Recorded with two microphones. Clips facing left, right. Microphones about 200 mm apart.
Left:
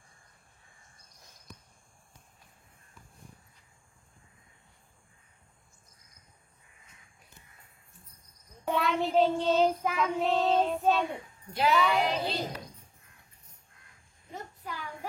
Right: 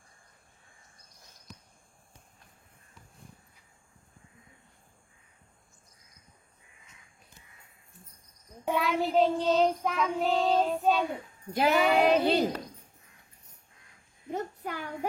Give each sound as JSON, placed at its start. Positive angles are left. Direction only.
{"t": 8.6, "sound": "child singing", "side_deg": 0}
{"t": 11.5, "sound": "speech", "side_deg": -55}
{"t": 14.3, "sound": "a sound", "side_deg": -60}